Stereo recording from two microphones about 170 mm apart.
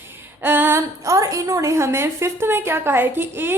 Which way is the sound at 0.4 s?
10° right (ahead or behind).